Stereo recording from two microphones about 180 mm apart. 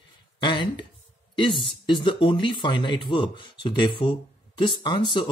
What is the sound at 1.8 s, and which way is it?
Speech, 25° left (ahead or behind).